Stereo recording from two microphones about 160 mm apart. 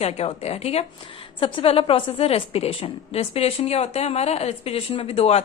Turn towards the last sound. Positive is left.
turn(degrees=40)  # may be behind; listen again after turning